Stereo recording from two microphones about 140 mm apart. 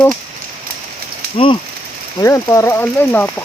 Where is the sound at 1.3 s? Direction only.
40° left (ahead or behind).